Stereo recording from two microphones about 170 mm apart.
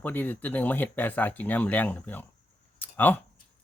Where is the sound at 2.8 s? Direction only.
10° left (ahead or behind).